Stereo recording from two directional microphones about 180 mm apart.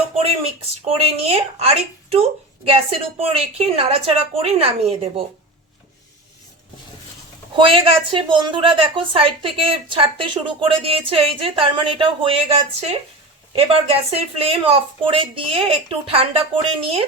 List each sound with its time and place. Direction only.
0.9 s speech: 35° right (ahead or behind)
7.5 s a woman's voice: 30° right (ahead or behind)